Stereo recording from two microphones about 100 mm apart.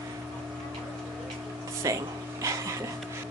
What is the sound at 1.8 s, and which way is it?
Speech, 35° right (ahead or behind).